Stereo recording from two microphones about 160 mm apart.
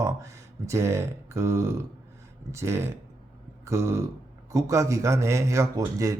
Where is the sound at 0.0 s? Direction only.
20° right (ahead or behind).